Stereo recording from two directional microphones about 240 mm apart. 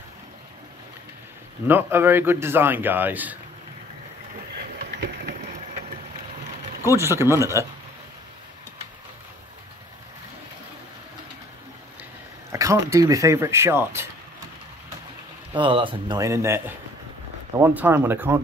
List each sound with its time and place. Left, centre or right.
1.7 s a man's voice: centre
6.9 s a man's voice: centre
12.4 s a man's voice: centre
15.5 s a man's voice: right